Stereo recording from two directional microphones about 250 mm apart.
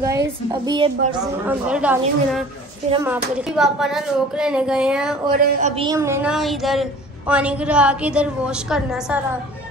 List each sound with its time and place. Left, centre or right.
0.0 s a woman's voice: centre
1.4 s a woman's voice: centre
5.6 s speech: right
5.9 s a woman's voice: centre